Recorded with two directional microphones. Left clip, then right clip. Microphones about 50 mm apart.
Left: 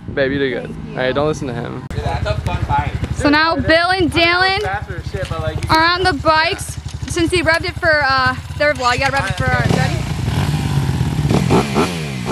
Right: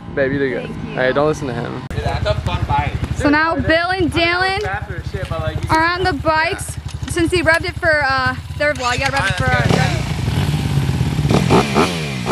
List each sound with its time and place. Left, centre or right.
0.1 s speech: centre
0.9 s speech: right
2.7 s speech: centre
3.2 s speech: left
7.2 s speech: left
9.1 s speech: right
10.3 s vehicle: left
11.1 s motorcycle: right